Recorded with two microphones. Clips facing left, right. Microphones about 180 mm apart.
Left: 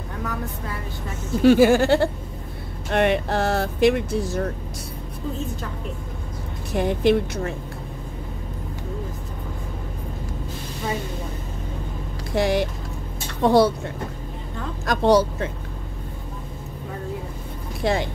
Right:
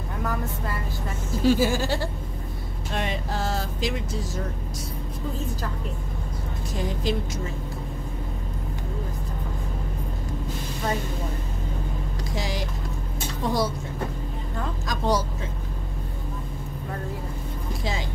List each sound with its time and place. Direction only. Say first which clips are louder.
1.4 s speech: left 7 dB; 65° left (ahead or behind)
6.7 s speech: left 9 dB; 65° left (ahead or behind)
12.4 s speech: left 11 dB; 60° left (ahead or behind)
17.8 s speech: left 9 dB; 60° left (ahead or behind)